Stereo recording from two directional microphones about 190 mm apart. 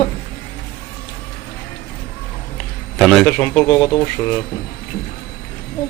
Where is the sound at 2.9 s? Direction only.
Centre (ahead or behind).